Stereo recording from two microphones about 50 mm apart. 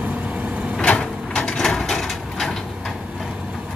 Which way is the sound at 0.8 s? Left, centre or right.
Left.